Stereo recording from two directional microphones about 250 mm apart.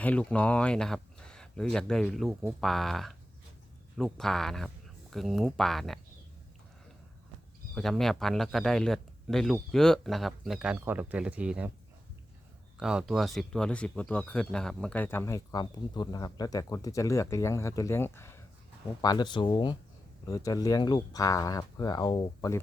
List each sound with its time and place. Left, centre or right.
0.0 s speech: centre
7.8 s speech: centre
12.7 s speech: centre